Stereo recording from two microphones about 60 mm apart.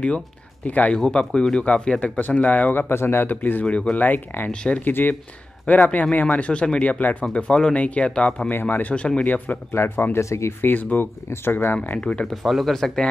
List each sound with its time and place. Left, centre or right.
0.7 s speech: left
0.9 s speech: centre
2.9 s speech: left
3.3 s speech: left
4.5 s speech: centre
4.8 s speech: left
7.3 s speech: centre
8.5 s speech: left
9.7 s speech: left
10.1 s speech: left
10.6 s speech: left
11.2 s speech: left
12.0 s speech: centre
12.4 s speech: centre